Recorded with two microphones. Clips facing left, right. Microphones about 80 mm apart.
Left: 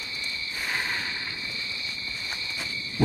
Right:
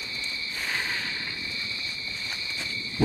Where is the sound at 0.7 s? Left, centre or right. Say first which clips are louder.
Left 1 dB; centre.